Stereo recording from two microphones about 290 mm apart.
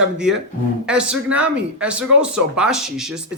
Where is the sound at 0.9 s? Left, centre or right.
Centre.